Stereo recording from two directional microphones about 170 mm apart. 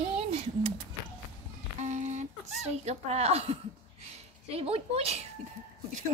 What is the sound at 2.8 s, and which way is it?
Speech, 40° right (ahead or behind).